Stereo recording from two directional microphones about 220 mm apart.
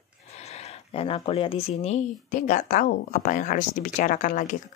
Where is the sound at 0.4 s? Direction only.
30° left (ahead or behind).